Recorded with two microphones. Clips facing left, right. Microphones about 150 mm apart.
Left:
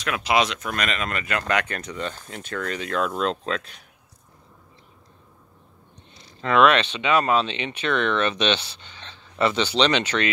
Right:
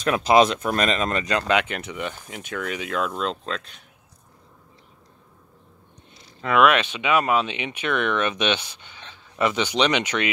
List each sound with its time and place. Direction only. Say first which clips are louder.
0.1 s speech: right 5 dB; 30° right (ahead or behind)
1.8 s speech: even; 10° right (ahead or behind)
6.4 s speech: left 1 dB; 10° right (ahead or behind)